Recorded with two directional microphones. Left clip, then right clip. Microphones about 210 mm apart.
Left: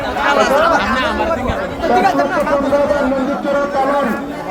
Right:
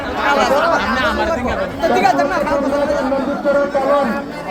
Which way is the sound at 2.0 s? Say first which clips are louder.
Left 1 dB; 20° right (ahead or behind).